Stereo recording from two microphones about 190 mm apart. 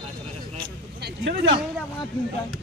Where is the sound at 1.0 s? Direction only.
60° right (ahead or behind).